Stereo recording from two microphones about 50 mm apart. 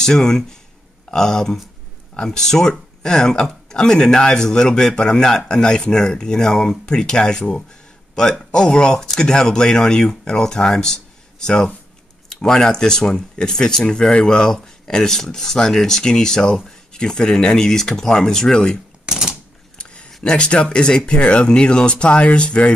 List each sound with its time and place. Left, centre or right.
0.0 s speech: centre
19.0 s typewriter: centre
19.8 s a sound: left
20.2 s speech: left